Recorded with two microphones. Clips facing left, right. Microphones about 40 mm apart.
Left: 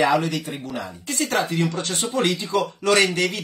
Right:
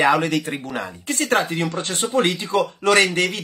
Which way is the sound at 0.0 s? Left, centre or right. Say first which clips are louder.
Right 2 dB; right.